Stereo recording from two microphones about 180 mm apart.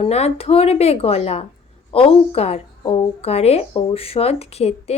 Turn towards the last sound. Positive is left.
turn(degrees=35)  # may be behind; listen again after turning